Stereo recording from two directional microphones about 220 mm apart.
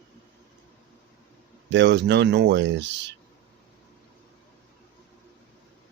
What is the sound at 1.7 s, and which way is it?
Speech, 55° right (ahead or behind).